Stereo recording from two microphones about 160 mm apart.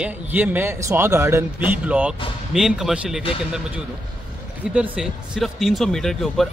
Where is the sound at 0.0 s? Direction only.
10° right (ahead or behind).